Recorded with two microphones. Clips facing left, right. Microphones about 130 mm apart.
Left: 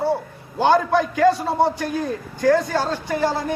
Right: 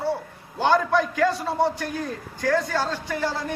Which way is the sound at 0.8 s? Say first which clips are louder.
Left 3 dB; 25° left (ahead or behind).